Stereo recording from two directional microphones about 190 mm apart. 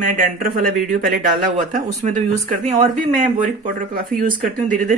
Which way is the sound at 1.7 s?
40° right (ahead or behind).